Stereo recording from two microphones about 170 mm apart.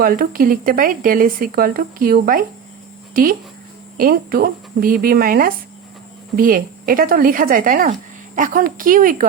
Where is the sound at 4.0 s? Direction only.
60° right (ahead or behind).